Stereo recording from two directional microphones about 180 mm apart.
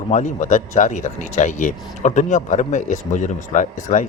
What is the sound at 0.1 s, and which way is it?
A man's voice, 45° left (ahead or behind).